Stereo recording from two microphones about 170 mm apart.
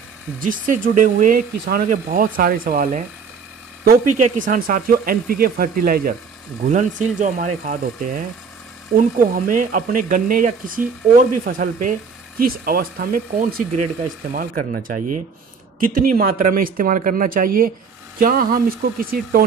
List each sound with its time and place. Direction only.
0.4 s speech: 55° right (ahead or behind)
6.7 s speech: 45° right (ahead or behind)